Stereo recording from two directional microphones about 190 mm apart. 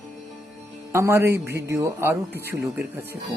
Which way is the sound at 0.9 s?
15° right (ahead or behind).